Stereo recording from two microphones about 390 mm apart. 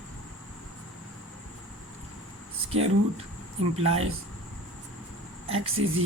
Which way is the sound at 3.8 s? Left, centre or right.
Right.